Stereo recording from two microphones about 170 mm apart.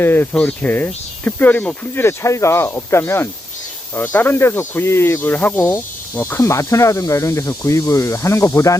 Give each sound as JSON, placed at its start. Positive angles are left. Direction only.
{"t": 0.0, "sound": "speech", "side_deg": 10}